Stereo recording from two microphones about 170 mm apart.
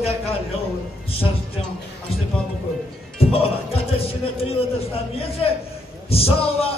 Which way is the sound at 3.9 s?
35° left (ahead or behind).